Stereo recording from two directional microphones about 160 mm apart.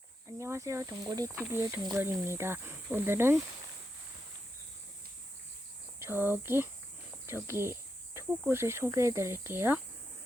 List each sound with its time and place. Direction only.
0.3 s speech: 15° right (ahead or behind)
1.5 s cricket: 15° right (ahead or behind)
6.0 s speech: 15° right (ahead or behind)
7.3 s cricket: 15° right (ahead or behind)